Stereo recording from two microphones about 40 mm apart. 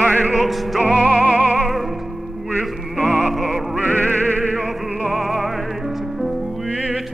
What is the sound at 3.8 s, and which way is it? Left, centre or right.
Music, left.